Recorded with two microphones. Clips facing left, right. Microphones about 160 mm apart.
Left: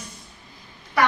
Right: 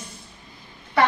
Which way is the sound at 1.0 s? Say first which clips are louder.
Right 1 dB; 25° right (ahead or behind).